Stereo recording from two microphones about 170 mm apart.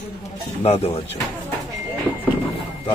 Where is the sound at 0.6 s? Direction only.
40° left (ahead or behind).